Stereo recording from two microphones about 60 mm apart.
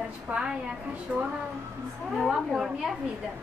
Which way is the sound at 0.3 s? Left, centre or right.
Right.